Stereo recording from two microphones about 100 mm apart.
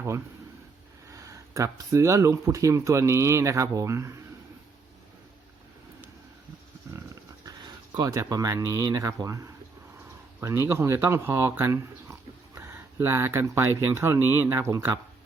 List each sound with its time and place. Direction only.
1.1 s speech: 30° right (ahead or behind)
7.4 s speech: 40° right (ahead or behind)